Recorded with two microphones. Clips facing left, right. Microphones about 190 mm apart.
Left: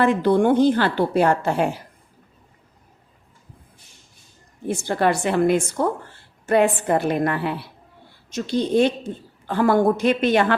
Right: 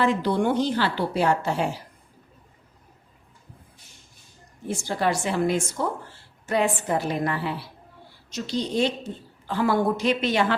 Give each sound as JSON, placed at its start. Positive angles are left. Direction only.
{"t": 0.0, "sound": "a woman's voice", "side_deg": 55}
{"t": 4.7, "sound": "a woman's voice", "side_deg": 60}